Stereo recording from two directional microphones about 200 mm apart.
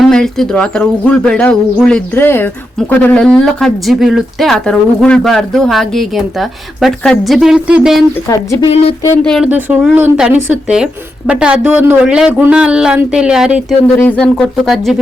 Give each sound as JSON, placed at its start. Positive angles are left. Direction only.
{"t": 0.0, "sound": "speech", "side_deg": 5}
{"t": 8.6, "sound": "speech", "side_deg": 30}
{"t": 9.0, "sound": "speech", "side_deg": 5}
{"t": 9.5, "sound": "speech", "side_deg": -10}
{"t": 13.9, "sound": "speech", "side_deg": 10}